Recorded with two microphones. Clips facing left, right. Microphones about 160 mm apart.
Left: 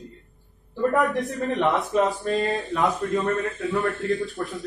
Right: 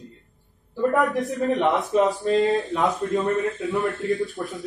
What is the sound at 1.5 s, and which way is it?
Speech, 20° right (ahead or behind).